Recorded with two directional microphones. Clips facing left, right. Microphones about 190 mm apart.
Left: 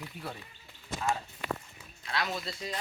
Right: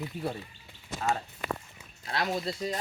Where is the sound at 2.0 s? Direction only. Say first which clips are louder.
Right 4 dB; 40° right (ahead or behind).